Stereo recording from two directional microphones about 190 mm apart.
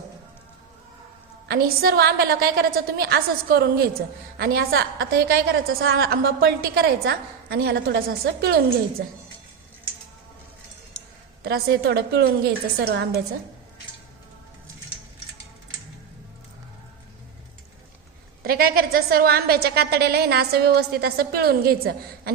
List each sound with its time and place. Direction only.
1.5 s a woman's voice: 55° right (ahead or behind)
11.4 s a woman's voice: 55° right (ahead or behind)
18.4 s a woman's voice: 50° right (ahead or behind)